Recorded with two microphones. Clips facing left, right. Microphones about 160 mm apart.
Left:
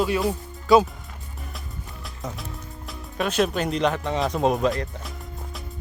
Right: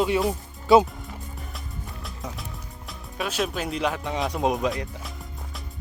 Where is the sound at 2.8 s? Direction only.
5° right (ahead or behind).